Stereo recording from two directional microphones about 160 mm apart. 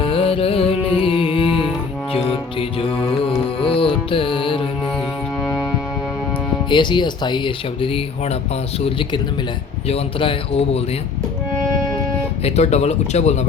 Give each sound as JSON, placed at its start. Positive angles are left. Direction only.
{"t": 0.0, "sound": "music", "side_deg": 35}
{"t": 4.9, "sound": "music", "side_deg": 0}
{"t": 6.7, "sound": "a man's voice", "side_deg": 30}
{"t": 12.4, "sound": "speech", "side_deg": 40}